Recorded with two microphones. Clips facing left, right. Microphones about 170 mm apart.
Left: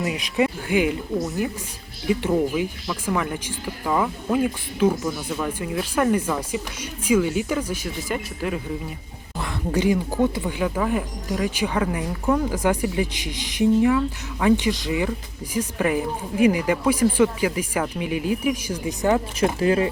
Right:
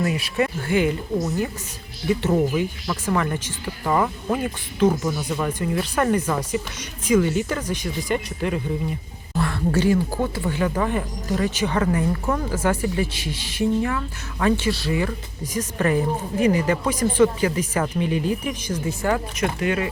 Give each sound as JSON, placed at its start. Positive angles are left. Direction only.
{"t": 0.0, "sound": "speech", "side_deg": 15}
{"t": 2.6, "sound": "speech", "side_deg": 5}
{"t": 9.3, "sound": "speech", "side_deg": 15}
{"t": 19.5, "sound": "speech", "side_deg": 30}